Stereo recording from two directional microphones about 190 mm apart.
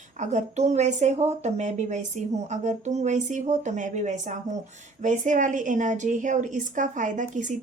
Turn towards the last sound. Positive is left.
turn(degrees=-40)  # may be behind; listen again after turning